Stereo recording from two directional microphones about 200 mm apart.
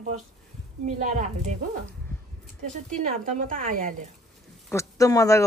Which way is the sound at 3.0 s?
40° right (ahead or behind).